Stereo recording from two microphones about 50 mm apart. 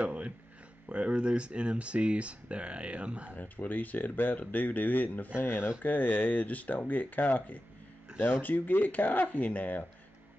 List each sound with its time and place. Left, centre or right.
0.0 s a sound: right
0.8 s speech: right
3.3 s speech: left